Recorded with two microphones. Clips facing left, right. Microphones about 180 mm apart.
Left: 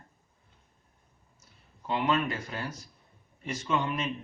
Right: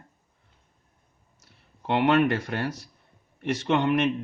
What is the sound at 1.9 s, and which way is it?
Speech, 70° right (ahead or behind).